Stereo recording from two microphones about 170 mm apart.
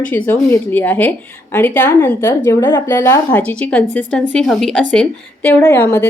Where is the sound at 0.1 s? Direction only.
10° left (ahead or behind).